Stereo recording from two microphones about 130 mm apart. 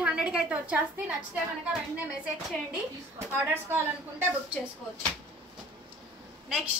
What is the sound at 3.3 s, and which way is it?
Speech, 15° right (ahead or behind).